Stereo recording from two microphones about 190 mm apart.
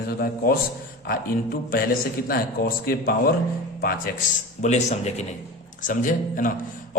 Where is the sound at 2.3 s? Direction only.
50° left (ahead or behind).